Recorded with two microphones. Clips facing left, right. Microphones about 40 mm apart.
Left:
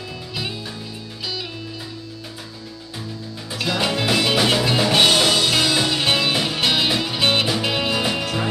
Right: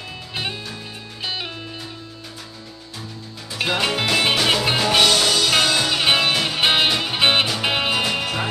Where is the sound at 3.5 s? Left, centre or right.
Right.